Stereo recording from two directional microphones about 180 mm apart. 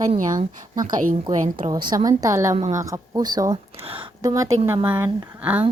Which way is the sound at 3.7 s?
30° right (ahead or behind).